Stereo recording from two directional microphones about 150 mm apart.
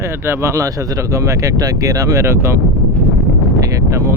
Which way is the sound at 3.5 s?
20° right (ahead or behind).